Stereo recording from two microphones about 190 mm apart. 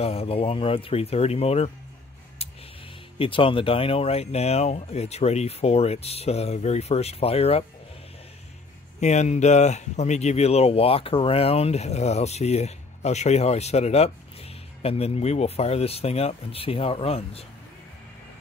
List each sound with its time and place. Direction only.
0.0 s speech: 30° left (ahead or behind)
2.4 s tick: 35° left (ahead or behind)
3.2 s speech: 30° left (ahead or behind)
9.0 s speech: 35° left (ahead or behind)